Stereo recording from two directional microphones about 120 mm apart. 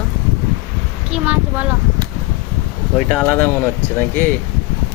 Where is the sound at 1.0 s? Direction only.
10° right (ahead or behind).